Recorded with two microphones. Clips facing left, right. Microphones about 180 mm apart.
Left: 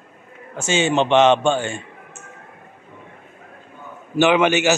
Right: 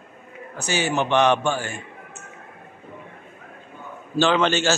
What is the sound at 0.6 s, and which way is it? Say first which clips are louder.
A man's voice: left 5 dB; 25° left (ahead or behind).